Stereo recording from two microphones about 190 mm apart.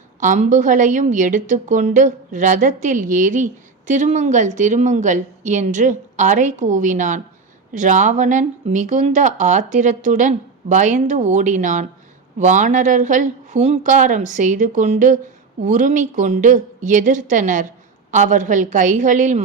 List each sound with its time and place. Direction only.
0.2 s a woman's voice: 40° right (ahead or behind)